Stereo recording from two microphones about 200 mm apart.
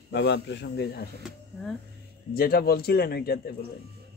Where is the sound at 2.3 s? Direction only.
50° left (ahead or behind).